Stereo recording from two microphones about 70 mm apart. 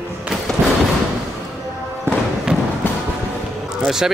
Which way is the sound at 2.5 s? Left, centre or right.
Centre.